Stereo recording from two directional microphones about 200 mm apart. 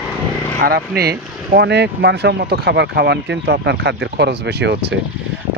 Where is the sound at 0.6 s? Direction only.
50° right (ahead or behind).